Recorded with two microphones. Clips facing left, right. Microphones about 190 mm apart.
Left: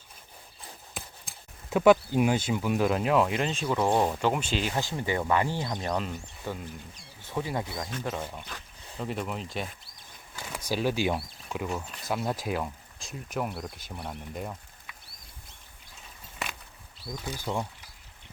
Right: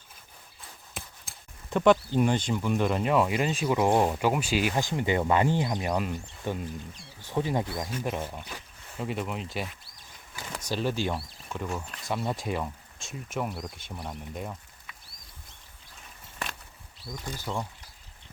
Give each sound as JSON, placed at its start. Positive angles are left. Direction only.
{"t": 0.9, "sound": "a sound", "side_deg": 0}
{"t": 1.7, "sound": "speech", "side_deg": 5}
{"t": 6.4, "sound": "speech", "side_deg": -20}
{"t": 17.2, "sound": "speech", "side_deg": 15}